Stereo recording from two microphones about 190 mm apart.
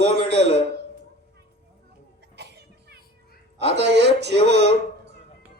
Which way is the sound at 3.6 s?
65° right (ahead or behind).